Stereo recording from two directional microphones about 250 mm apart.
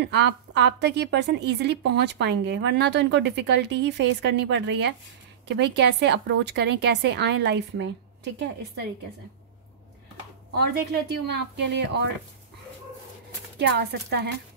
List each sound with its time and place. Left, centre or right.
0.0 s a woman's voice: right
11.2 s a woman's voice: right
13.6 s speech: right